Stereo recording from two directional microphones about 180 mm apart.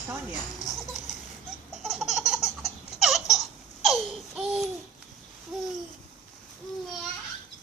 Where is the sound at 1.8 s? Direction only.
Centre (ahead or behind).